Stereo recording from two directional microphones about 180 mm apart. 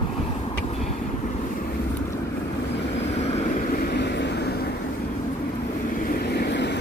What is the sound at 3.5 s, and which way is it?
Vehicle, 55° left (ahead or behind).